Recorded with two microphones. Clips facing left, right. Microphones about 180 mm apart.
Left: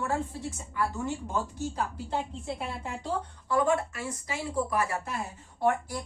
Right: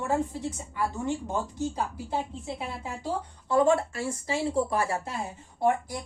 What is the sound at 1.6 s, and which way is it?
Speech, 20° right (ahead or behind).